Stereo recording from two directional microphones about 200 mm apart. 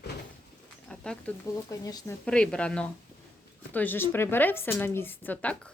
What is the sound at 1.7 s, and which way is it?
Speech, 15° left (ahead or behind).